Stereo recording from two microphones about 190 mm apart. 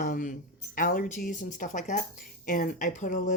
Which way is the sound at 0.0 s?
45° left (ahead or behind).